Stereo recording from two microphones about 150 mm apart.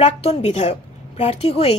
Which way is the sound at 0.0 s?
45° left (ahead or behind).